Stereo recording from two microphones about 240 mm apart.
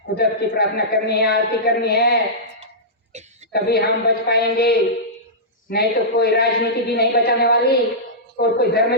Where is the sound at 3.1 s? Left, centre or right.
Right.